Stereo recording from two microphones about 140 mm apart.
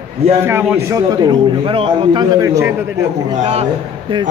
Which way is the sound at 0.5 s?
15° right (ahead or behind).